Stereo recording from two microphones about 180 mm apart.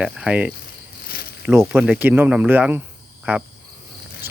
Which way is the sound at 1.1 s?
60° left (ahead or behind).